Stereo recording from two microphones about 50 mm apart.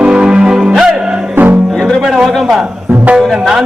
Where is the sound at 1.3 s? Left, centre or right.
Right.